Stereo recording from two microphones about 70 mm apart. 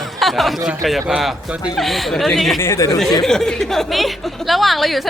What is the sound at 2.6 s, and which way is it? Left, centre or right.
Speech, left.